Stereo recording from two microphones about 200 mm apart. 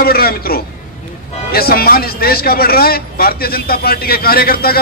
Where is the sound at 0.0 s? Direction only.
50° left (ahead or behind).